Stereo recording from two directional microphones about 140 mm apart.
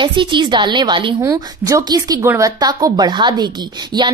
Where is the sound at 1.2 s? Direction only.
25° right (ahead or behind).